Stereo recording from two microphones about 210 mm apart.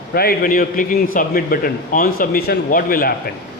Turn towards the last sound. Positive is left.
turn(degrees=45)  # may be behind; listen again after turning